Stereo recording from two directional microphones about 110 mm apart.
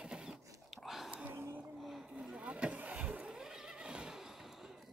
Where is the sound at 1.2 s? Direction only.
20° right (ahead or behind).